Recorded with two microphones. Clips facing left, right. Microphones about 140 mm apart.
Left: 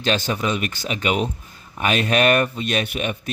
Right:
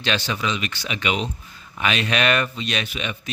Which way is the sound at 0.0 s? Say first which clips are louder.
Left 3 dB; 45° left (ahead or behind).